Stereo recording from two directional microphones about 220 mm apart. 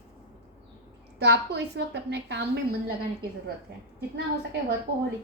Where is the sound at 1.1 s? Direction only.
50° right (ahead or behind).